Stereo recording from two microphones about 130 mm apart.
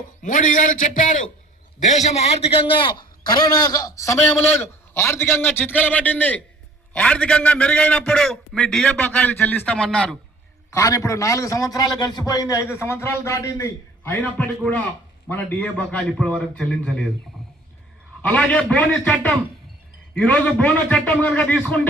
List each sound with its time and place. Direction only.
0.2 s a man's voice: 85° left
1.8 s a man's voice: 60° left (ahead or behind); by 10.2 s 5° left (ahead or behind)
10.8 s a man's voice: 25° left (ahead or behind); by 17.1 s 5° left (ahead or behind)
18.2 s a man's voice: 10° left (ahead or behind)